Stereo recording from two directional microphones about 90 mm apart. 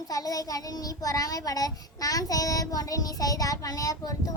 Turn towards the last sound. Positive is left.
turn(degrees=40)  # may be behind; listen again after turning